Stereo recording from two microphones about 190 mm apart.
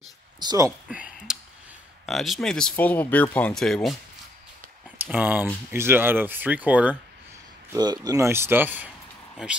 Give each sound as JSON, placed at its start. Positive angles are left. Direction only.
{"t": 0.4, "sound": "speech", "side_deg": -20}
{"t": 0.7, "sound": "a sound", "side_deg": -5}
{"t": 2.0, "sound": "speech", "side_deg": 0}
{"t": 4.9, "sound": "speech", "side_deg": -10}
{"t": 7.7, "sound": "speech", "side_deg": -20}